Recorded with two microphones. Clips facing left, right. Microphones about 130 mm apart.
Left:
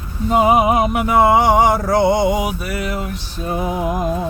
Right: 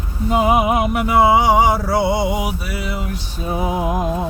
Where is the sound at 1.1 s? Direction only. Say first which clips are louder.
Even; 10° right (ahead or behind).